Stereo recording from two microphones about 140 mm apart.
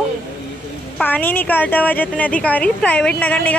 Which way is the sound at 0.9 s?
10° left (ahead or behind).